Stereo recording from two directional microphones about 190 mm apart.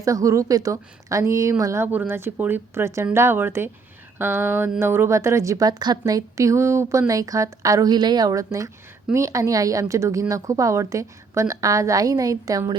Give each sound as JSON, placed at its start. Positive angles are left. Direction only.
{"t": 0.0, "sound": "a woman's voice", "side_deg": -15}